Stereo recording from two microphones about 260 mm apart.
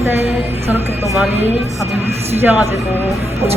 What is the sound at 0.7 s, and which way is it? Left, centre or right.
Speech, centre.